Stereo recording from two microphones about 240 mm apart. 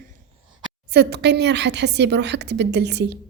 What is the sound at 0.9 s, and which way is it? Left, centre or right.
A woman's voice, right.